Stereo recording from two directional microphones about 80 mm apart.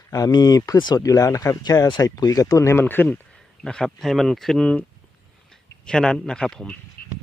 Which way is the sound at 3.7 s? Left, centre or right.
Centre.